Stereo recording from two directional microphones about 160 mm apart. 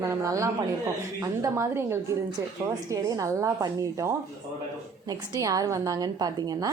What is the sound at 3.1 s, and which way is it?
Speech, 20° right (ahead or behind).